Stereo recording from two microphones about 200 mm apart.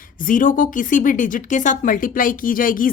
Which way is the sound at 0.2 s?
45° left (ahead or behind).